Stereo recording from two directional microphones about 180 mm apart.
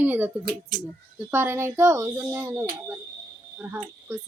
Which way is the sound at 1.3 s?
15° right (ahead or behind).